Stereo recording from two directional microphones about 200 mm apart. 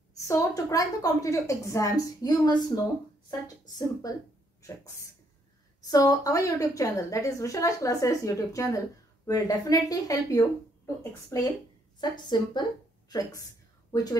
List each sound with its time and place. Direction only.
0.3 s a woman's voice: 15° left (ahead or behind)
5.9 s a woman's voice: 20° left (ahead or behind)